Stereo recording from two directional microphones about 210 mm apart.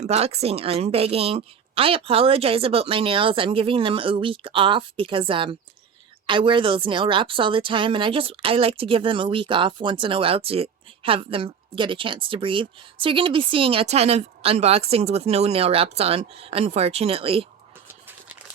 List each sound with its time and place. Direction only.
0.0 s a woman's voice: 30° right (ahead or behind)